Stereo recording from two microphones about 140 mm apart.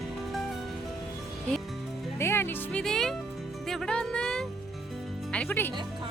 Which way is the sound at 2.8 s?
5° left (ahead or behind).